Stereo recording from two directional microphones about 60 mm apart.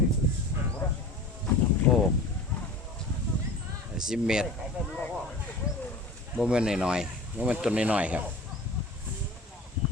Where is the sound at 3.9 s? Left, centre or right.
Centre.